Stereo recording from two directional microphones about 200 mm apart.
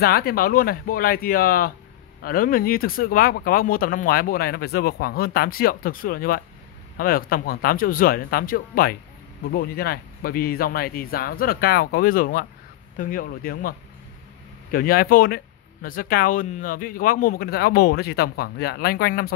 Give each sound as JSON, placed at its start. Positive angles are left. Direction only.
{"t": 0.0, "sound": "speech", "side_deg": 50}